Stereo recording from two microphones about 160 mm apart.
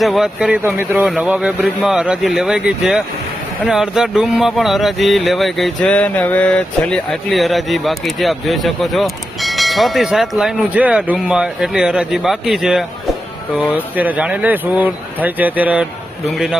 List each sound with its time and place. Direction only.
0.0 s speech: centre (ahead or behind)